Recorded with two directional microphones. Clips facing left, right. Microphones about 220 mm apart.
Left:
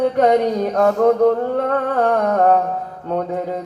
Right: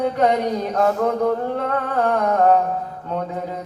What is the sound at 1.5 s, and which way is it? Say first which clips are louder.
Music: left 4 dB; 40° left (ahead or behind).